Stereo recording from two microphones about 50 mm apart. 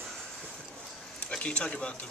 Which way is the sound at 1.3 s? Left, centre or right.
Left.